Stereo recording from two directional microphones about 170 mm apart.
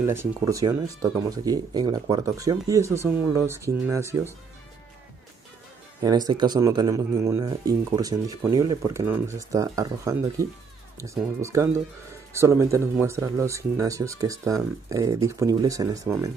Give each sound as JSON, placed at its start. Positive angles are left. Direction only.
{"t": 0.0, "sound": "speech", "side_deg": -15}
{"t": 6.0, "sound": "speech", "side_deg": -20}